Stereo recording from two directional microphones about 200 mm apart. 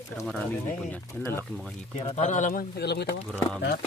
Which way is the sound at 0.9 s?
10° left (ahead or behind).